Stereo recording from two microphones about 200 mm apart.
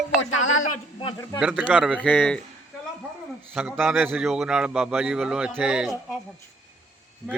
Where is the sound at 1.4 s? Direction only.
5° right (ahead or behind).